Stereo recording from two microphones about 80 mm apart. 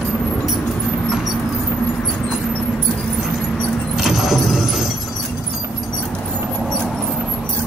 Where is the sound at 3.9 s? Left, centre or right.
Centre.